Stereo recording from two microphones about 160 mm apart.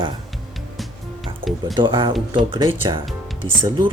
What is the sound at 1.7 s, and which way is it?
Speech, 30° right (ahead or behind).